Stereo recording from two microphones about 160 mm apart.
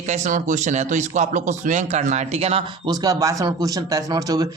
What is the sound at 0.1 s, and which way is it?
Speech, 55° right (ahead or behind).